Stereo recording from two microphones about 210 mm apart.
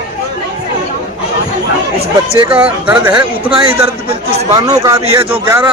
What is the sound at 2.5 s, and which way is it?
Speech, 5° right (ahead or behind).